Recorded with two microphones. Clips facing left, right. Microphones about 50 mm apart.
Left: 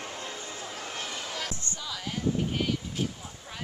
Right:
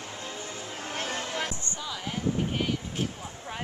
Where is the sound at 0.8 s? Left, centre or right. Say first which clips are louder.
Right 6 dB; right.